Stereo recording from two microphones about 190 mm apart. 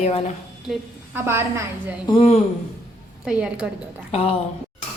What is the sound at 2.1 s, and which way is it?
Speech, 30° left (ahead or behind).